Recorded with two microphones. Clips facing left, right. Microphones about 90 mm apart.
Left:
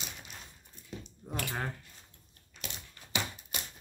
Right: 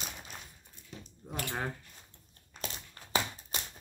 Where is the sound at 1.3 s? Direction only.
Centre (ahead or behind).